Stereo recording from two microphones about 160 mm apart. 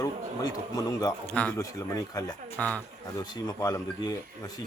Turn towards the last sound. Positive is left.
turn(degrees=25)  # may be behind; listen again after turning